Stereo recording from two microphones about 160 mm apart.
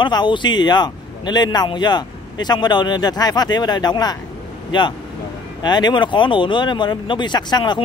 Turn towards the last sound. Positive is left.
turn(degrees=25)  # may be behind; listen again after turning